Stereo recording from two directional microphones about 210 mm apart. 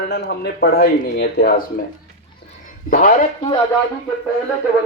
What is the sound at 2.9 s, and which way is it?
Speech, 40° left (ahead or behind).